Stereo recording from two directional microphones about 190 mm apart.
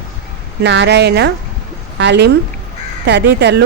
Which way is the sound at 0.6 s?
65° right (ahead or behind).